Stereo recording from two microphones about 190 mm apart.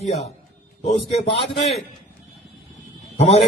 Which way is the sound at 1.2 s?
30° left (ahead or behind).